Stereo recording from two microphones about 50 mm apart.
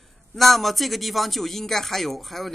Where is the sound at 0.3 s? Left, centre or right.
Centre.